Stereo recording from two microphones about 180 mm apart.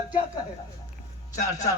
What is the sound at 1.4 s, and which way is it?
Speech, 20° left (ahead or behind).